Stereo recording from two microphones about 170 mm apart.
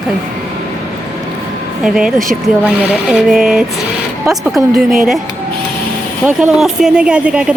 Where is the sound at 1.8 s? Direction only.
5° right (ahead or behind).